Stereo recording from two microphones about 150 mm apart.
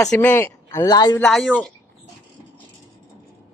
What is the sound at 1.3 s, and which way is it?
Speech, centre (ahead or behind).